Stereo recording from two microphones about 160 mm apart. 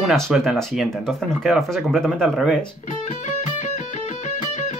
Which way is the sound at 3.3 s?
50° left (ahead or behind).